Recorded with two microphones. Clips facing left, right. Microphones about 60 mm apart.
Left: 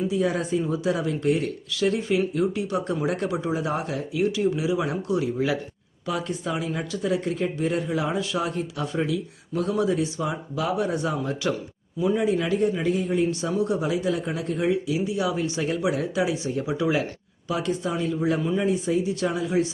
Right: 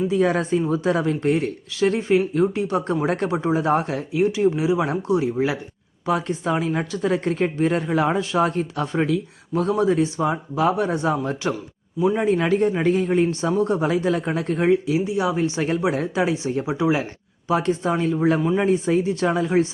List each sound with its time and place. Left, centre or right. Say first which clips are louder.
0.1 s a woman's voice: right 4 dB; right
11.9 s speech: right 3 dB; right
12.2 s a woman's voice: right 4 dB; right
17.5 s a woman's voice: right 5 dB; right